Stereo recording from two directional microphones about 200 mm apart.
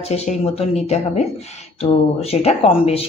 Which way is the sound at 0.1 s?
30° left (ahead or behind).